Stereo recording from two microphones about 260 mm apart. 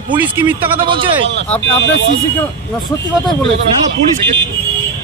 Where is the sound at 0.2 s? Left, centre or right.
Centre.